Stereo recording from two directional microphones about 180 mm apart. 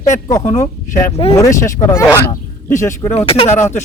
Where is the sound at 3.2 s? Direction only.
30° left (ahead or behind).